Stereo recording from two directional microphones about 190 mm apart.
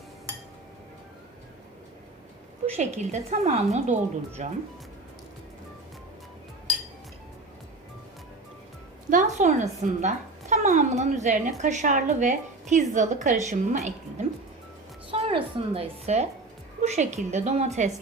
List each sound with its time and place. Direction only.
2.6 s speech: 35° right (ahead or behind)
9.0 s speech: 40° right (ahead or behind)
15.1 s a woman's voice: 30° right (ahead or behind)